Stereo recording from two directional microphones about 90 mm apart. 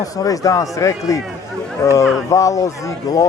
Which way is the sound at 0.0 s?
40° left (ahead or behind).